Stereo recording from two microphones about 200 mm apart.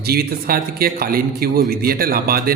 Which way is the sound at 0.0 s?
50° right (ahead or behind).